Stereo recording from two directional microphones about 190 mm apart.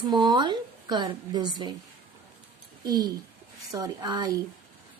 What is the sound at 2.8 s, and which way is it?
A woman's voice, 20° right (ahead or behind).